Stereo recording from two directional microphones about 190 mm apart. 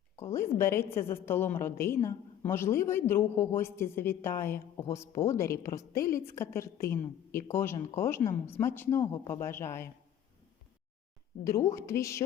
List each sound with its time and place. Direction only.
0.2 s a woman's voice: 15° left (ahead or behind)
11.4 s a woman's voice: 15° left (ahead or behind)